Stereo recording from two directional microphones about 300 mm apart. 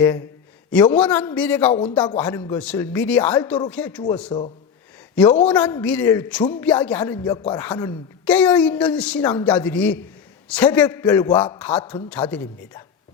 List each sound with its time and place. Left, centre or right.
0.0 s a woman's voice: centre
4.3 s speech: centre
5.1 s a woman's voice: centre